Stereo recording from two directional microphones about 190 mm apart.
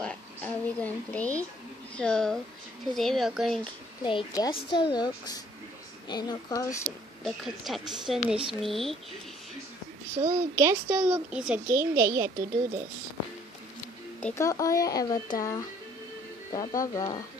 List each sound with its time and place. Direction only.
0.0 s speech: 5° left (ahead or behind)
4.0 s speech: 25° left (ahead or behind)
7.2 s speech: centre (ahead or behind)
10.2 s speech: 15° right (ahead or behind)
14.2 s speech: 15° left (ahead or behind)